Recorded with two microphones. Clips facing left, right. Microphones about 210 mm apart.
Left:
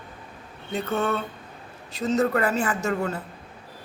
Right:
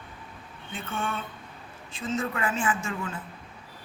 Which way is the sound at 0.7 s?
40° left (ahead or behind).